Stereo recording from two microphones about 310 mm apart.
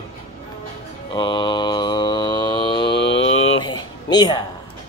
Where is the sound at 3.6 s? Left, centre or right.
Centre.